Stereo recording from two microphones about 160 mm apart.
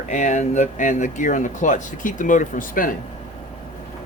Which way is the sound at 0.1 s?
50° left (ahead or behind).